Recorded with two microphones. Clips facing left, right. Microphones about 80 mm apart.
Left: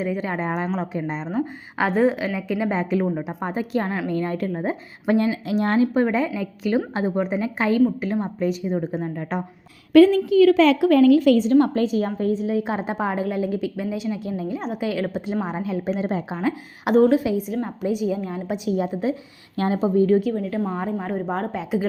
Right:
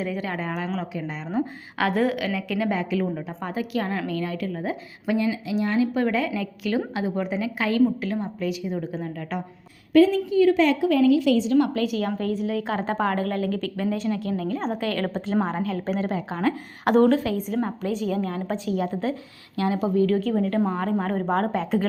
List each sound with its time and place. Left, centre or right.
0.0 s a woman's voice: left
1.3 s a woman's voice: centre; by 4.8 s left
5.0 s a woman's voice: left
6.9 s a woman's voice: left
7.2 s a woman's voice: left
8.2 s a woman's voice: left
9.9 s a woman's voice: left
10.8 s a woman's voice: left
11.5 s a woman's voice: left; by 19.1 s centre
19.5 s a woman's voice: left
20.7 s a woman's voice: centre